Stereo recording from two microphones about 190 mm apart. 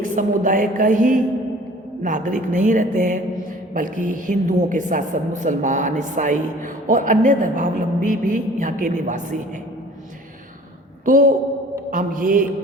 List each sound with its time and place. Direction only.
0.0 s a woman's voice: 45° right (ahead or behind)
11.0 s a woman's voice: 45° right (ahead or behind)